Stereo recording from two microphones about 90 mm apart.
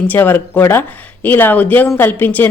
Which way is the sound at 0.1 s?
25° left (ahead or behind).